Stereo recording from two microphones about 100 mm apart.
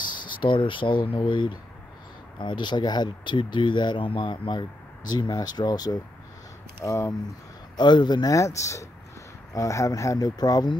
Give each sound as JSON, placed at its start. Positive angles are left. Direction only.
{"t": 0.0, "sound": "speech", "side_deg": 50}
{"t": 7.7, "sound": "speech", "side_deg": 50}